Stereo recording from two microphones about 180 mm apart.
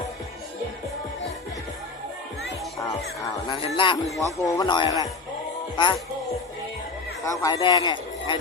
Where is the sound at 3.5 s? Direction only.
30° left (ahead or behind).